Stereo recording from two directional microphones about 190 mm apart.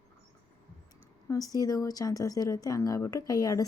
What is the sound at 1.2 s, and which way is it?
Speech, 20° left (ahead or behind).